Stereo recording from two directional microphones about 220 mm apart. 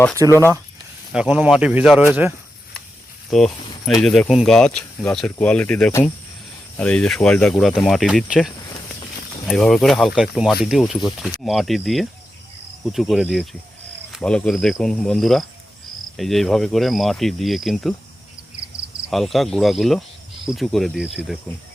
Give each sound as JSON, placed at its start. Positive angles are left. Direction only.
{"t": 0.2, "sound": "speech", "side_deg": -15}
{"t": 1.1, "sound": "speech", "side_deg": -5}
{"t": 3.2, "sound": "speech", "side_deg": 0}
{"t": 19.1, "sound": "speech", "side_deg": 0}